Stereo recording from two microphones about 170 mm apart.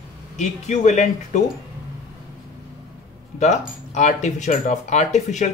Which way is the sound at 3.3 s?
45° left (ahead or behind).